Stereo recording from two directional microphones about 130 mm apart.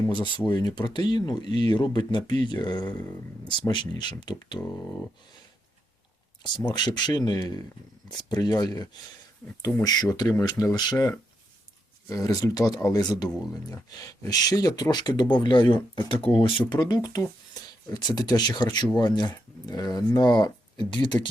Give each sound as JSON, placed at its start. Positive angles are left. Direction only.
{"t": 0.1, "sound": "speech", "side_deg": 35}
{"t": 4.6, "sound": "speech", "side_deg": 15}
{"t": 6.7, "sound": "speech", "side_deg": 35}